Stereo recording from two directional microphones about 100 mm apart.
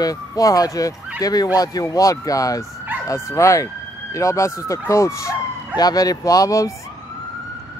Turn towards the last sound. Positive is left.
turn(degrees=35)  # may be behind; listen again after turning